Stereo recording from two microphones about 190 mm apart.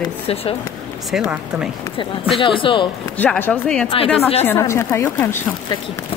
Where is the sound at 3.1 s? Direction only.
10° left (ahead or behind).